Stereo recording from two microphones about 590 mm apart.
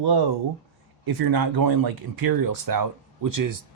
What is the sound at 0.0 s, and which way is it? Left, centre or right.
Speech, right.